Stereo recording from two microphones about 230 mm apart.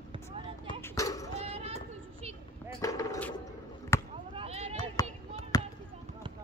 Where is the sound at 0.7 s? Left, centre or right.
Centre.